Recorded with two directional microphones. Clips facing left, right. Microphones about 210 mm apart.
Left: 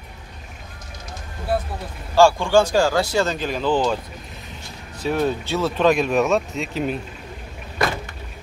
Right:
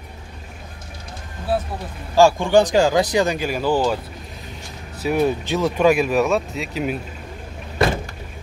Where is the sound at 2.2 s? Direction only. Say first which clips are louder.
Right 1 dB; 15° right (ahead or behind).